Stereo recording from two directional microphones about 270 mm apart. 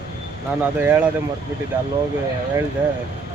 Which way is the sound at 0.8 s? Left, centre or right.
Centre.